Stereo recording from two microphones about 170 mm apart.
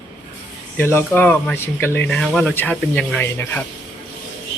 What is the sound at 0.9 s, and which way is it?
Speech, 10° left (ahead or behind).